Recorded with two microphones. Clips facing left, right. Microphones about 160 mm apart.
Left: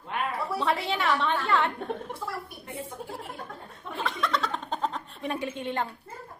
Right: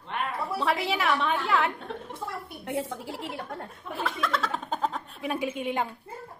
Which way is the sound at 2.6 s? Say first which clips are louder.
Right 6 dB; 85° right.